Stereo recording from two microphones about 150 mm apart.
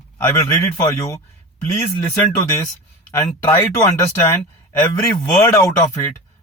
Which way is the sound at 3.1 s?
15° left (ahead or behind).